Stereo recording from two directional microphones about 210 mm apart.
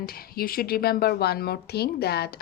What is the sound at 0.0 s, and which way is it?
Speech, 45° left (ahead or behind).